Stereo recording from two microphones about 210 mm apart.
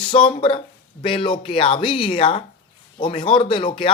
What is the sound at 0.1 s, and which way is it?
Speech, 25° left (ahead or behind).